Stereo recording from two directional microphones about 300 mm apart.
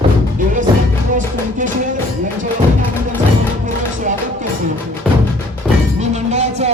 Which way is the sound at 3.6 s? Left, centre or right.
Right.